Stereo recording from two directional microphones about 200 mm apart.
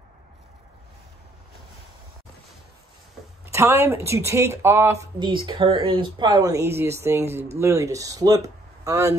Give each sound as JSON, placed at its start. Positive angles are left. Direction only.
{"t": 3.5, "sound": "speech", "side_deg": -15}